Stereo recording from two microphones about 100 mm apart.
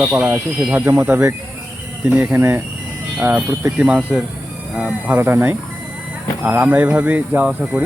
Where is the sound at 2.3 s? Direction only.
30° right (ahead or behind).